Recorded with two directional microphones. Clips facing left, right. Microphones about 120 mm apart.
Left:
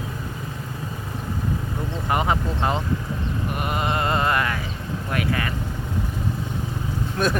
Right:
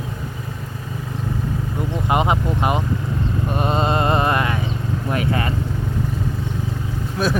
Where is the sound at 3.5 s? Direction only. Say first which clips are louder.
Right 6 dB; 25° right (ahead or behind).